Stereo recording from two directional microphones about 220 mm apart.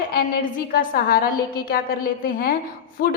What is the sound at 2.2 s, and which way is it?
Speech, 40° left (ahead or behind).